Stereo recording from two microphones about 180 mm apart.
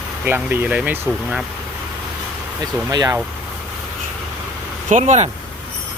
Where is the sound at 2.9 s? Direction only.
20° right (ahead or behind).